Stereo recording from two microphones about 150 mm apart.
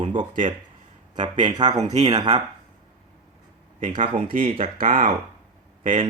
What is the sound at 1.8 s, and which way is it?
Speech, 50° right (ahead or behind).